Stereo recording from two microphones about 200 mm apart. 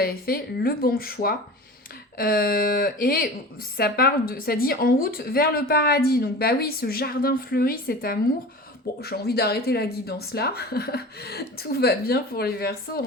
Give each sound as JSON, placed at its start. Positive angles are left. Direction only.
{"t": 0.0, "sound": "a woman's voice", "side_deg": 50}